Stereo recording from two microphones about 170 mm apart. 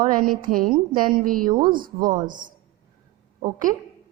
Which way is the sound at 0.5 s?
55° right (ahead or behind).